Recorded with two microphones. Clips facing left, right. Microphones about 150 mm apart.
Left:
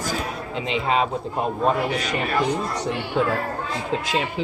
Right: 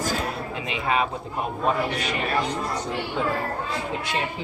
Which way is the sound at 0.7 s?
30° left (ahead or behind).